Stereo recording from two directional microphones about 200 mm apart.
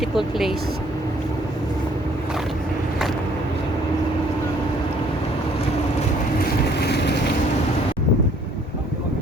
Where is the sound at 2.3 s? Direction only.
Centre (ahead or behind).